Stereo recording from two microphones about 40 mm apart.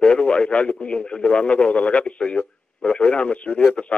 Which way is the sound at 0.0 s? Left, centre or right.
Left.